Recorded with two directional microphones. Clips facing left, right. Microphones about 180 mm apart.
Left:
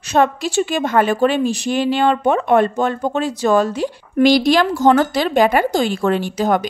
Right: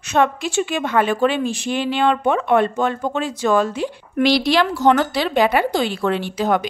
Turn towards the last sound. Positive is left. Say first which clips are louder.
# left 2 dB
turn(degrees=45)  # may be behind; listen again after turning